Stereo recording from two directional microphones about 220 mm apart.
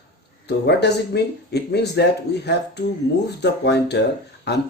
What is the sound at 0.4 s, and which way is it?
Speech, 50° left (ahead or behind).